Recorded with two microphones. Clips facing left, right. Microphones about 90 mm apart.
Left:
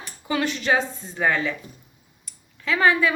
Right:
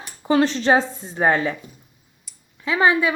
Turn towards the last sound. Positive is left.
turn(degrees=-20)  # may be behind; listen again after turning